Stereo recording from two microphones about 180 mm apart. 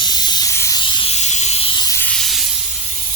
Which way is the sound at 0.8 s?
30° left (ahead or behind).